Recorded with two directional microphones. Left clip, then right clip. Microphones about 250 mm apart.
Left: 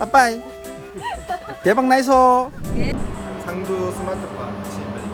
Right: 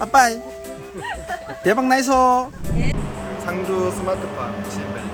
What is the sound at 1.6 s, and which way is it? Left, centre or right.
Speech, centre.